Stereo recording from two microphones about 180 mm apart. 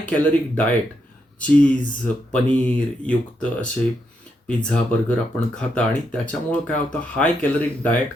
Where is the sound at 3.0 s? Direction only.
5° left (ahead or behind).